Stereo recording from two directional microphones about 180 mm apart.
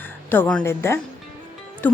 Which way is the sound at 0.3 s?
10° left (ahead or behind).